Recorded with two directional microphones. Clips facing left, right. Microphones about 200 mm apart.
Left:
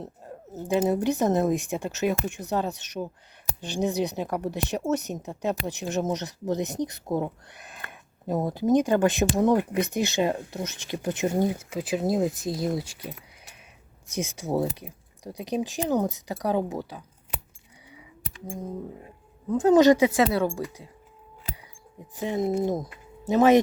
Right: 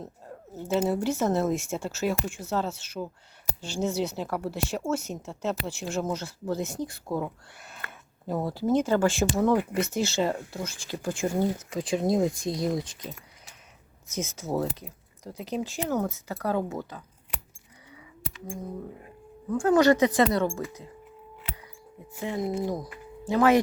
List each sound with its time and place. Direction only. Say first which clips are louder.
0.5 s speech: left 2 dB; 15° left (ahead or behind)
19.5 s speech: left 3 dB; 20° left (ahead or behind)
22.1 s speech: left 4 dB; 20° left (ahead or behind)